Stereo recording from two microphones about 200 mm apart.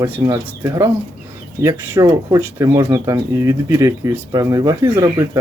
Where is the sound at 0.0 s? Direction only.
15° right (ahead or behind).